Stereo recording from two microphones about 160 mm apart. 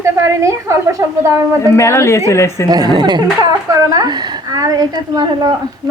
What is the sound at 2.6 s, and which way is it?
A woman's voice, 25° right (ahead or behind).